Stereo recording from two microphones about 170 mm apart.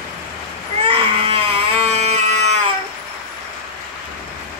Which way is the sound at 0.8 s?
35° right (ahead or behind).